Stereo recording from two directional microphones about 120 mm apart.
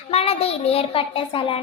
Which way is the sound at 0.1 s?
55° left (ahead or behind).